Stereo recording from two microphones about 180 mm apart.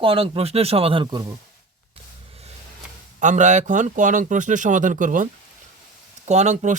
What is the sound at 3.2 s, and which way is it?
Speech, 45° right (ahead or behind).